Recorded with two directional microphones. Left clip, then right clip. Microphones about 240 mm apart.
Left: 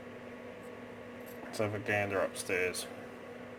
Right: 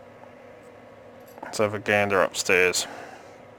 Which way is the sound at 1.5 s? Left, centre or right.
Right.